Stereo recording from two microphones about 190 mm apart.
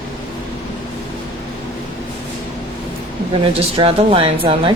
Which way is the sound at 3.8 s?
30° right (ahead or behind).